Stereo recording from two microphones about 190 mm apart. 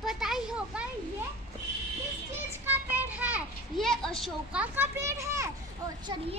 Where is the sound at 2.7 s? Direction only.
10° right (ahead or behind); by 6.3 s 25° right (ahead or behind).